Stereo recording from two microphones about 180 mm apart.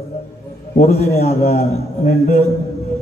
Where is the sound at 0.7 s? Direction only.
40° left (ahead or behind).